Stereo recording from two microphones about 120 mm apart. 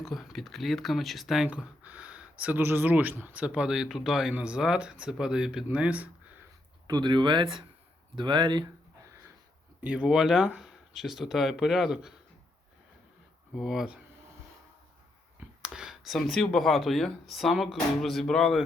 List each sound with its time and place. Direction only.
0.0 s speech: centre (ahead or behind)
6.8 s speech: 35° right (ahead or behind)
9.8 s speech: 10° right (ahead or behind)
13.6 s speech: 5° right (ahead or behind)
15.6 s speech: 5° right (ahead or behind)